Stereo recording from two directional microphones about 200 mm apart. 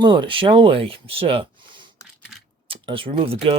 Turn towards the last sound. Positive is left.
turn(degrees=-25)  # may be behind; listen again after turning